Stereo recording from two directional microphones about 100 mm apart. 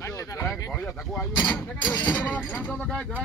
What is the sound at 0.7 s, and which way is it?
Speech, 10° left (ahead or behind).